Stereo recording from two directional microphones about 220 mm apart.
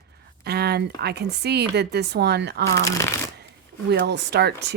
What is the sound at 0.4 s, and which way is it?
Speech, 45° right (ahead or behind).